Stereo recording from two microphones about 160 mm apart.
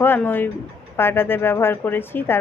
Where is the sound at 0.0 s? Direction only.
10° left (ahead or behind).